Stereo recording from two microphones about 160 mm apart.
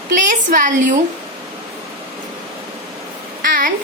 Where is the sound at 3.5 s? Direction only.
60° right (ahead or behind).